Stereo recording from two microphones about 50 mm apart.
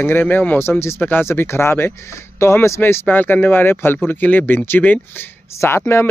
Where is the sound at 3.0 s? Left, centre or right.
Left.